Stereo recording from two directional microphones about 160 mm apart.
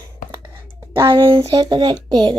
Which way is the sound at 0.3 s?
20° right (ahead or behind).